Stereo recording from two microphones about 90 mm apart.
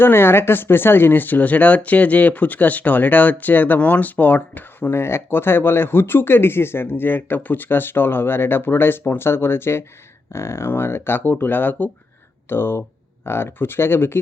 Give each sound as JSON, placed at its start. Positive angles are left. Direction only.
{"t": 0.0, "sound": "speech", "side_deg": 25}